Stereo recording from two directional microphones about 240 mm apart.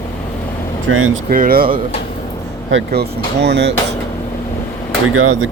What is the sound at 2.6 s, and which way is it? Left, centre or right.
A man's voice, right.